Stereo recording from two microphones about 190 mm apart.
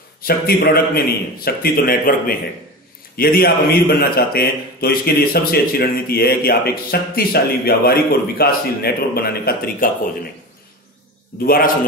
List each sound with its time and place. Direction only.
0.2 s a man's voice: 55° left (ahead or behind)
11.4 s a man's voice: 50° left (ahead or behind)